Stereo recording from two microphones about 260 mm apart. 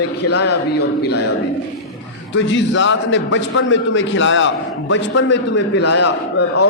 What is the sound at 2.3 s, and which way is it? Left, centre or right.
A man's voice, left.